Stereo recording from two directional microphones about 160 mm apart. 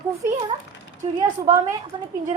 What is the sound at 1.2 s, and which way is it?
Speech, 20° right (ahead or behind).